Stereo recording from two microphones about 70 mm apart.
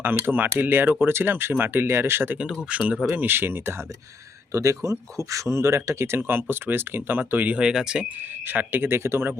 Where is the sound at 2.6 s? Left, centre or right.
Centre.